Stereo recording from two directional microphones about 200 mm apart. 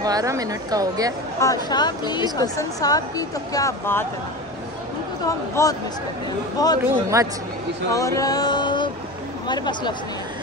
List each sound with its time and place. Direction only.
0.0 s a woman's voice: 15° right (ahead or behind)
1.4 s speech: 20° left (ahead or behind)
5.2 s speech: 15° left (ahead or behind)
6.8 s a woman's voice: 15° right (ahead or behind)
7.9 s music: 15° left (ahead or behind)
9.5 s speech: 20° left (ahead or behind)